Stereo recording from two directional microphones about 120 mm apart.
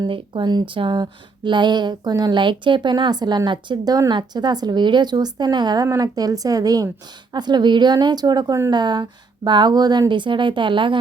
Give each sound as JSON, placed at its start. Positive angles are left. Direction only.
{"t": 0.0, "sound": "a woman's voice", "side_deg": -40}